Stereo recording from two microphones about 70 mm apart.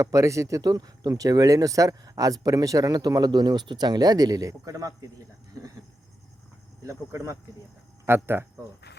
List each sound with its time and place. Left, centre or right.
0.0 s speech: right
6.8 s speech: right
8.0 s speech: right